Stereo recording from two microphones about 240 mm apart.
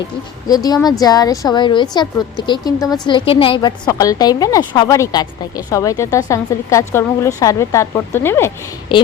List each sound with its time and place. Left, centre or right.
0.4 s a woman's voice: centre